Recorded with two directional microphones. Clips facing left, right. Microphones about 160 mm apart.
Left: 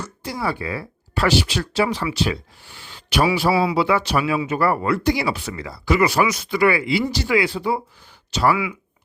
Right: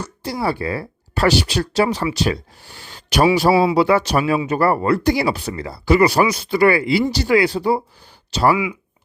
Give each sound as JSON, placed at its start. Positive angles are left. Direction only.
{"t": 0.0, "sound": "speech", "side_deg": -30}